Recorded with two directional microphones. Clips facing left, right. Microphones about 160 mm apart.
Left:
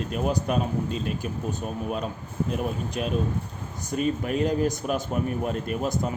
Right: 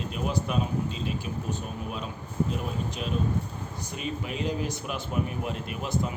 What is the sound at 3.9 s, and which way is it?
Speech, 45° left (ahead or behind).